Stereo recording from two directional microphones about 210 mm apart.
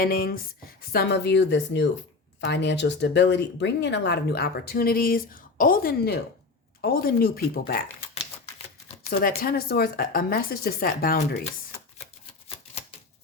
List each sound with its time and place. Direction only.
0.0 s speech: 45° left (ahead or behind)
9.0 s speech: 45° left (ahead or behind)